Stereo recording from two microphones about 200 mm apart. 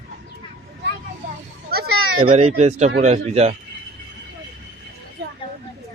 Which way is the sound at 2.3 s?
30° right (ahead or behind).